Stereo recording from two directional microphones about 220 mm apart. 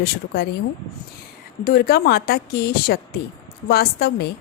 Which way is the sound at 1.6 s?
45° left (ahead or behind).